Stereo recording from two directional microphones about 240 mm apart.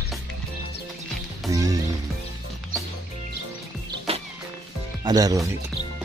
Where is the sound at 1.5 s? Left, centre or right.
Centre.